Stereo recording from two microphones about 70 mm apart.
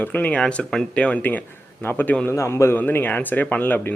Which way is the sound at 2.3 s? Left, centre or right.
Left.